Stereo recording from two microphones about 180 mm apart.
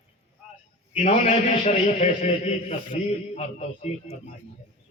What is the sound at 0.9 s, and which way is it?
A man's voice, 35° left (ahead or behind).